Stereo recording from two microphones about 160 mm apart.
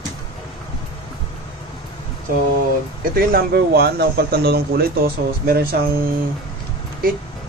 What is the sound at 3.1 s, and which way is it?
Speech, 70° right (ahead or behind).